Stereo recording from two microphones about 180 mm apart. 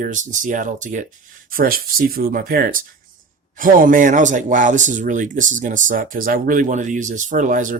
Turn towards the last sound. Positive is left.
turn(degrees=-45)  # may be behind; listen again after turning